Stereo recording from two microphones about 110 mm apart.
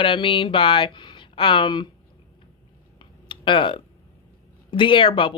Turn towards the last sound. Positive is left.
turn(degrees=50)  # may be behind; listen again after turning